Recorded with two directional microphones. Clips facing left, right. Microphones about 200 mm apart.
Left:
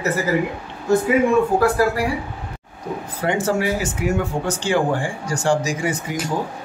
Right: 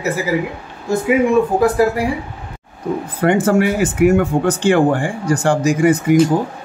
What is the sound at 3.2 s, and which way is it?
Speech, 55° right (ahead or behind).